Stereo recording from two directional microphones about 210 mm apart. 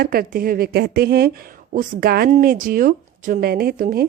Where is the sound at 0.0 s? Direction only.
45° right (ahead or behind).